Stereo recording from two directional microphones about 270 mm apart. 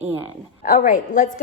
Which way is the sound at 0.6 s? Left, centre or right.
Left.